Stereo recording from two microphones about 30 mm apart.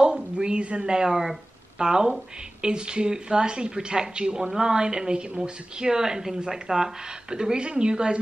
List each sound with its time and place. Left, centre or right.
0.0 s a sound: right
1.1 s speech: centre
1.8 s speech: right
7.2 s speech: right